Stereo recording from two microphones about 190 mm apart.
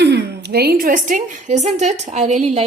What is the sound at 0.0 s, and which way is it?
A woman's voice, 60° right (ahead or behind).